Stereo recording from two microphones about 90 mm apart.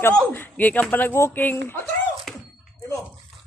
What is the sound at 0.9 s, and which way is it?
Speech, 25° left (ahead or behind).